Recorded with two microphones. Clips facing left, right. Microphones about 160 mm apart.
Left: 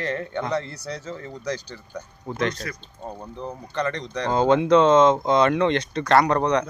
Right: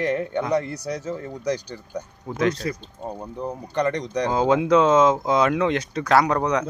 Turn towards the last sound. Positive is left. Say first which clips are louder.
# left 1 dB
turn(degrees=-5)  # may be behind; listen again after turning